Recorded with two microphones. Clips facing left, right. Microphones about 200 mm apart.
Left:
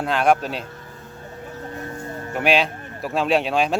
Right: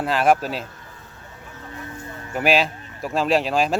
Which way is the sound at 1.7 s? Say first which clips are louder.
Left 2 dB; 45° left (ahead or behind).